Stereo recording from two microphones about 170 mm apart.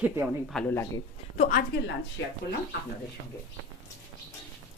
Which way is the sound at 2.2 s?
90° left.